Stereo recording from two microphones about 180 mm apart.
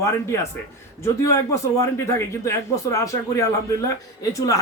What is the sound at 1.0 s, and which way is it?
A man's voice, 15° left (ahead or behind).